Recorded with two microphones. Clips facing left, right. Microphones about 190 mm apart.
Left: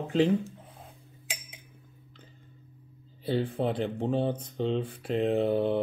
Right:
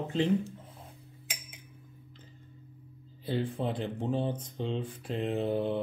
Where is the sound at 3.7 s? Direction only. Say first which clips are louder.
Left 4 dB; 30° left (ahead or behind).